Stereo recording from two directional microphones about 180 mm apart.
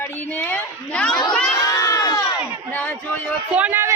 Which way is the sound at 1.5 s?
20° left (ahead or behind).